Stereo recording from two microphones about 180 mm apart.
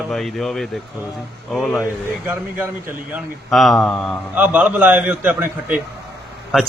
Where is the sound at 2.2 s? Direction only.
10° right (ahead or behind).